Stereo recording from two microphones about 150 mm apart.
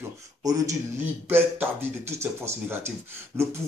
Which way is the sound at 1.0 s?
15° right (ahead or behind).